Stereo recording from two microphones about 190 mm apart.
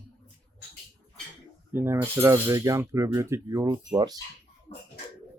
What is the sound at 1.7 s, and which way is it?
Speech, 10° right (ahead or behind).